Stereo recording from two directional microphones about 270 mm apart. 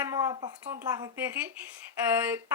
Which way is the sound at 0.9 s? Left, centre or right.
Centre.